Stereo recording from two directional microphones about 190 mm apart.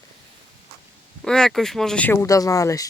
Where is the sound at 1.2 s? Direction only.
5° left (ahead or behind).